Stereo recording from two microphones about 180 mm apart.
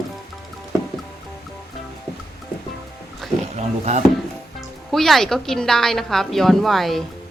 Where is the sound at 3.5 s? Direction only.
40° right (ahead or behind).